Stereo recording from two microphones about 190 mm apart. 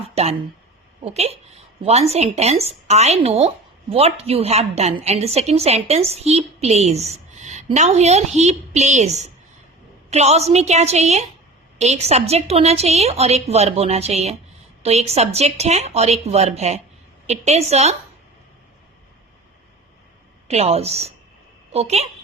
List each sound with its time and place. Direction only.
0.0 s a sound: 35° right (ahead or behind)
1.0 s speech: 35° right (ahead or behind)
20.5 s speech: 35° right (ahead or behind)